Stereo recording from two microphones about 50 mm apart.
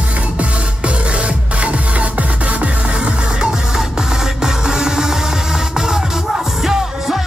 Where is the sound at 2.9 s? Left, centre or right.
Centre.